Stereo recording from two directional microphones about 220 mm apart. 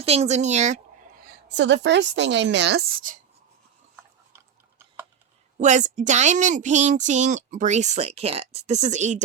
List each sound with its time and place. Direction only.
0.0 s a woman's voice: 30° right (ahead or behind)
1.3 s a woman's voice: 50° right (ahead or behind)
5.5 s a woman's voice: 35° right (ahead or behind)